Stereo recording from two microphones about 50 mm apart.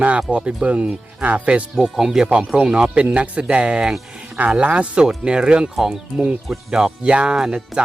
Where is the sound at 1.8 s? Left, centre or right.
Centre.